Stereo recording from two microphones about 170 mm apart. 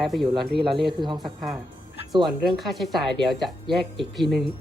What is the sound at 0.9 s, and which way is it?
Speech, 25° right (ahead or behind).